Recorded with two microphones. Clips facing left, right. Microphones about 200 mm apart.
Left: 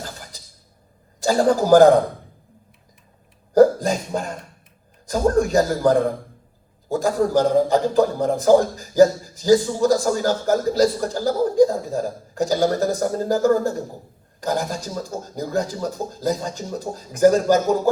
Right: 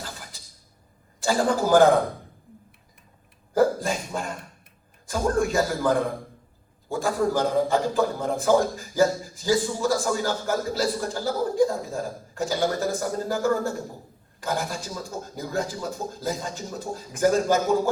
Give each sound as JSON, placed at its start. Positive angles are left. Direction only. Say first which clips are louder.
{"t": 1.2, "sound": "a man's voice", "louder": "left 5 dB", "side_deg": 40}
{"t": 3.5, "sound": "a sound", "louder": "left 7 dB", "side_deg": 40}
{"t": 5.0, "sound": "a man's voice", "louder": "left 5 dB", "side_deg": 40}